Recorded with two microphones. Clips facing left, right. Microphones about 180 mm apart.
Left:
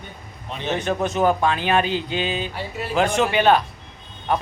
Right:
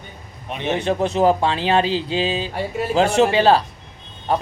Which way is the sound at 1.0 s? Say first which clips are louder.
Right 2 dB; 30° right (ahead or behind).